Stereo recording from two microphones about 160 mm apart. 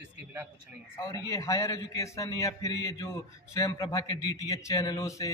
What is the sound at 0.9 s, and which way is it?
A man's voice, 20° left (ahead or behind).